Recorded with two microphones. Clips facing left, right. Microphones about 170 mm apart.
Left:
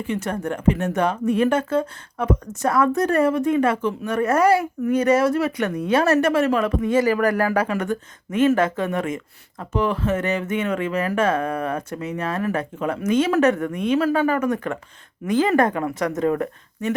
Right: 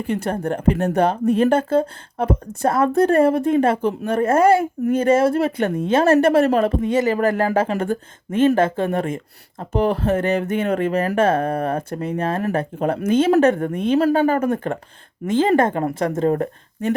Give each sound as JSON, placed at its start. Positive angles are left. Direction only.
{"t": 0.1, "sound": "a woman's voice", "side_deg": -30}